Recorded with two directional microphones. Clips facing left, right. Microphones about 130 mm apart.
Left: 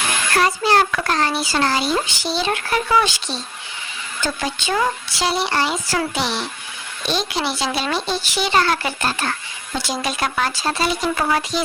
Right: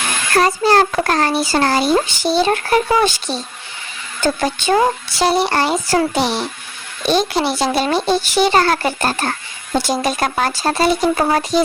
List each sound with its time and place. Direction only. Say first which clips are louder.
0.3 s a child's voice: right 4 dB; 40° right (ahead or behind)